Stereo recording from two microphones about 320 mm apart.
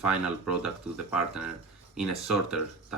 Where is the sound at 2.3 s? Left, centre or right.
Centre.